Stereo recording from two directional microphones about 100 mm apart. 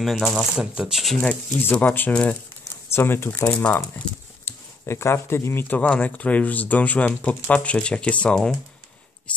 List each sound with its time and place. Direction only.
0.0 s speech: centre (ahead or behind)
1.2 s speech: 15° left (ahead or behind)
2.6 s a sound: 25° left (ahead or behind)
3.4 s speech: 10° left (ahead or behind)
4.5 s speech: 25° left (ahead or behind); by 8.5 s 5° left (ahead or behind)